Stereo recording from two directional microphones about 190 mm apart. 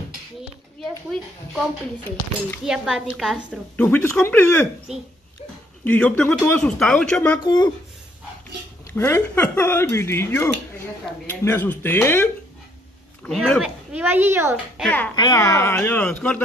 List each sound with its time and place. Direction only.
0.7 s a woman's voice: centre (ahead or behind)
3.7 s speech: 10° left (ahead or behind)
5.9 s speech: 5° left (ahead or behind)
7.4 s speech: 20° left (ahead or behind)
8.9 s speech: 15° left (ahead or behind); by 14.6 s 10° right (ahead or behind)
14.8 s speech: 10° left (ahead or behind)
15.1 s speech: 20° left (ahead or behind)